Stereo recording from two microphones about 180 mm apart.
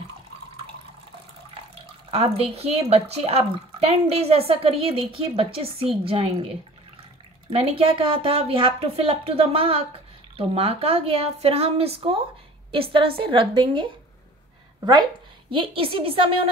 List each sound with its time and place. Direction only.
2.0 s speech: 35° right (ahead or behind)
7.5 s speech: 30° right (ahead or behind)
13.2 s a woman's voice: 30° right (ahead or behind)
15.5 s a woman's voice: 30° right (ahead or behind)